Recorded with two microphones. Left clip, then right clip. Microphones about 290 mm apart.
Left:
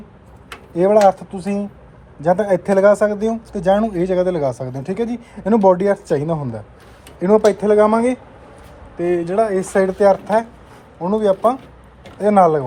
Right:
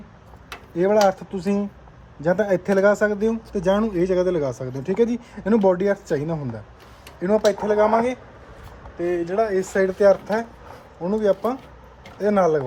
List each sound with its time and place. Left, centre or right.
0.8 s speech: centre
7.4 s speech: centre
7.9 s speech: left
9.0 s speech: centre